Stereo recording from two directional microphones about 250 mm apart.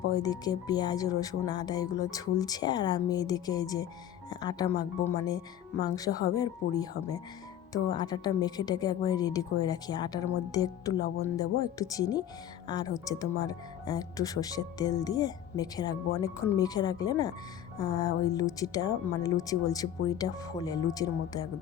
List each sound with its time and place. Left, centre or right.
0.1 s speech: centre